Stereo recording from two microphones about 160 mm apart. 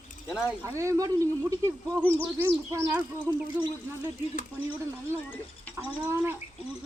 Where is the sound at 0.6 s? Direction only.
20° right (ahead or behind).